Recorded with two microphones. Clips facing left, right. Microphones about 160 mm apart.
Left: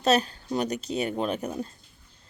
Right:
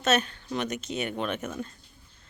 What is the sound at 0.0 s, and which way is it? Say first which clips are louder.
Speech: left 3 dB; 35° left (ahead or behind).